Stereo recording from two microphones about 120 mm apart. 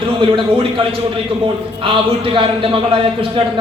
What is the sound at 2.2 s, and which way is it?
A man's voice, 45° right (ahead or behind).